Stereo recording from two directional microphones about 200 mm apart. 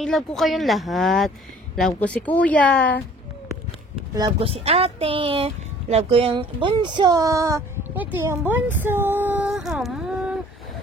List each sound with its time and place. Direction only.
0.0 s speech: centre (ahead or behind)
4.1 s speech: 20° right (ahead or behind); by 10.4 s centre (ahead or behind)